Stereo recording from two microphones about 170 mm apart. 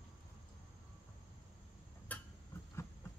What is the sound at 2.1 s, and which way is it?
Tick-tock, 10° left (ahead or behind).